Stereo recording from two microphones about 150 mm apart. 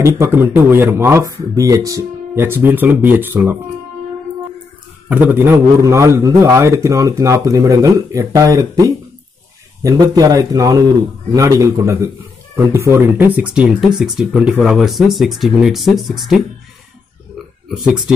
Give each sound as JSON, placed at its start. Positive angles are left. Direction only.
{"t": 0.2, "sound": "speech", "side_deg": -15}
{"t": 5.1, "sound": "a man's voice", "side_deg": -10}